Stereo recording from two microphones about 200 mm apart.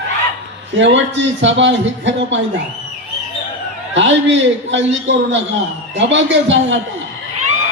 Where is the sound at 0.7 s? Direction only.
65° right (ahead or behind).